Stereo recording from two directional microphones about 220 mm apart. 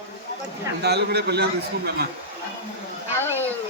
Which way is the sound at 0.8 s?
50° right (ahead or behind).